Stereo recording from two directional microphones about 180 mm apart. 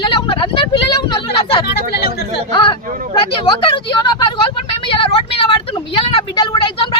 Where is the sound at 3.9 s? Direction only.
25° left (ahead or behind).